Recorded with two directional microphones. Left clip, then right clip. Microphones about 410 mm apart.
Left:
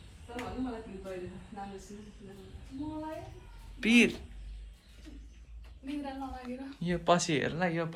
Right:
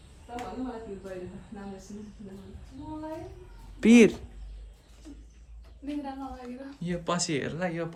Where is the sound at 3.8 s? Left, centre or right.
Centre.